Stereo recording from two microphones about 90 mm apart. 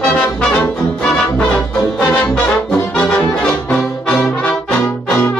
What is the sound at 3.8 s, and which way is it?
Trombone, 5° left (ahead or behind).